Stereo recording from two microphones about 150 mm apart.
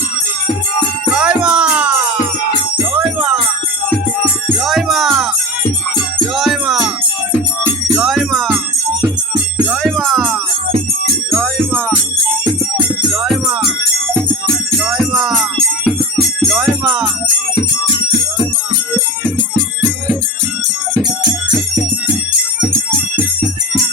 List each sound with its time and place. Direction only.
1.1 s music: 5° right (ahead or behind)
4.6 s music: centre (ahead or behind)
6.3 s music: centre (ahead or behind)
7.9 s music: centre (ahead or behind)
8.4 s music: 15° right (ahead or behind)
9.6 s music: centre (ahead or behind)
13.2 s music: centre (ahead or behind)